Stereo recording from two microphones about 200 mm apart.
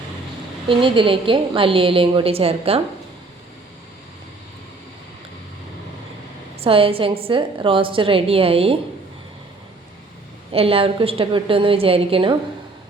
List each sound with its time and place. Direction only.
0.7 s a woman's voice: 25° right (ahead or behind)
6.6 s a woman's voice: 25° right (ahead or behind)
10.5 s a woman's voice: 30° right (ahead or behind)